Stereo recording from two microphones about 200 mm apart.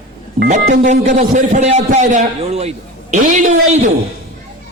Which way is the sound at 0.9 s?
40° right (ahead or behind).